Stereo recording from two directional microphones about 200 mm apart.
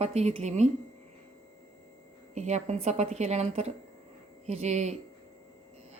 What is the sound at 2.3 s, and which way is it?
Speech, 35° right (ahead or behind).